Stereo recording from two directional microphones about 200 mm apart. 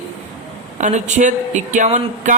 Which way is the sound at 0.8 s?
35° right (ahead or behind).